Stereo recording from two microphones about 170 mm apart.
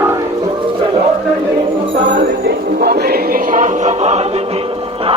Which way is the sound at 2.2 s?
70° right (ahead or behind).